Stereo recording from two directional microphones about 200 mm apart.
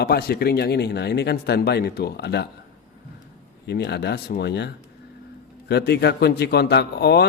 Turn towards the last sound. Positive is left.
turn(degrees=55)  # may be behind; listen again after turning